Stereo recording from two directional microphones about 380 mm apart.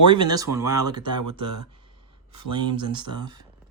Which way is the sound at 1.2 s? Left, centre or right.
Right.